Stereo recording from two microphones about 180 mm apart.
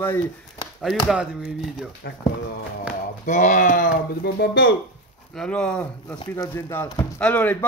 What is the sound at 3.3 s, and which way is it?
Speech, 45° left (ahead or behind).